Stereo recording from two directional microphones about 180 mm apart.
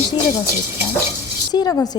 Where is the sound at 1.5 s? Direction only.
20° left (ahead or behind).